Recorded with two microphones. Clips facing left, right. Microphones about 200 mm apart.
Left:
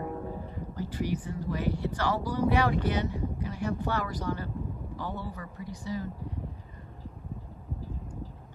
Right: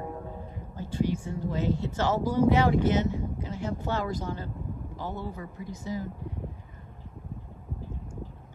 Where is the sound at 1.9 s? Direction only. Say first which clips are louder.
Right 3 dB; 25° right (ahead or behind).